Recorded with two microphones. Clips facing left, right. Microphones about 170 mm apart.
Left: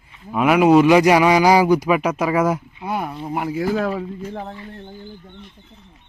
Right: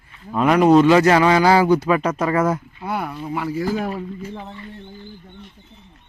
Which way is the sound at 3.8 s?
90° left.